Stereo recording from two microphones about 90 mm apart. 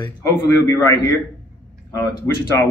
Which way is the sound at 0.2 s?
40° left (ahead or behind).